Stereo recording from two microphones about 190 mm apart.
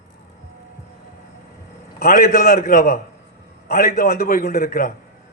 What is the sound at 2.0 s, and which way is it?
A man's voice, 55° left (ahead or behind).